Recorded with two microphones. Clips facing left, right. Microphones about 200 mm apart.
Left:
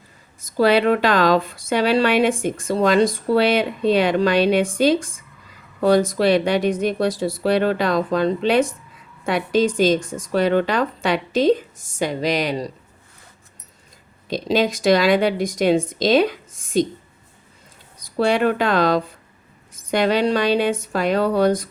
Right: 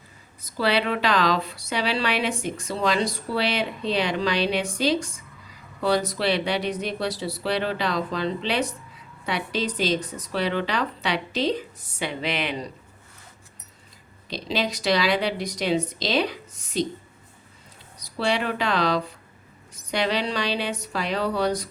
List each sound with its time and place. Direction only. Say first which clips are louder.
0.4 s speech: left 8 dB; 45° left (ahead or behind)
14.3 s speech: left 8 dB; 50° left (ahead or behind)
18.0 s speech: left 7 dB; 50° left (ahead or behind)